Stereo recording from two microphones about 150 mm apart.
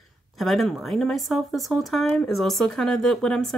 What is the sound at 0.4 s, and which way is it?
Speech, centre (ahead or behind).